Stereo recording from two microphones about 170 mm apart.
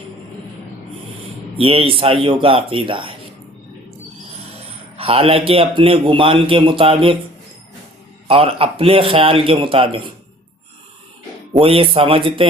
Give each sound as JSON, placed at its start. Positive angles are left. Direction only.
{"t": 1.5, "sound": "a man's voice", "side_deg": -35}
{"t": 4.9, "sound": "a man's voice", "side_deg": -35}
{"t": 8.3, "sound": "a man's voice", "side_deg": -35}
{"t": 11.5, "sound": "a man's voice", "side_deg": -35}